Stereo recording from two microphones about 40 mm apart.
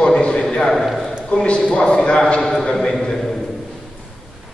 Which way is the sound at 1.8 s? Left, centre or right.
Left.